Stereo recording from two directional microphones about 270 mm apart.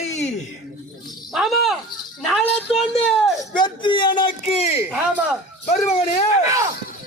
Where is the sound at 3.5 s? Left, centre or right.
Centre.